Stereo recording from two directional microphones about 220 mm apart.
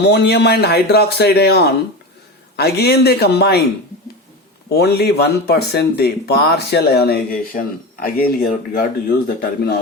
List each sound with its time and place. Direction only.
0.0 s speech: 50° left (ahead or behind)
4.7 s speech: 45° left (ahead or behind)